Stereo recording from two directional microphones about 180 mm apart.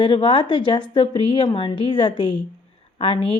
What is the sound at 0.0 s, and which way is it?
Speech, 25° left (ahead or behind).